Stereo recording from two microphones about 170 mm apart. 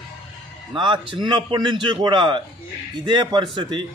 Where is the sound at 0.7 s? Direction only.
30° right (ahead or behind).